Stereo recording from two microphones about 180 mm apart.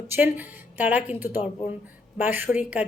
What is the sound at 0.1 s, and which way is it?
A woman's voice, 10° right (ahead or behind).